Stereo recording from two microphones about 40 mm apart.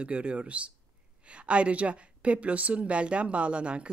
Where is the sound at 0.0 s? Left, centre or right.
Right.